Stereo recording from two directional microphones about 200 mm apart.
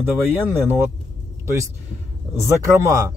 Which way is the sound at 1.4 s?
15° right (ahead or behind).